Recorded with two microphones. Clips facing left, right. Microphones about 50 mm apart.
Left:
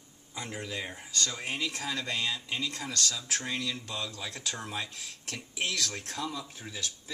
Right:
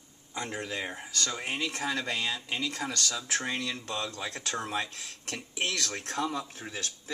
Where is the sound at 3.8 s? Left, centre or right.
Right.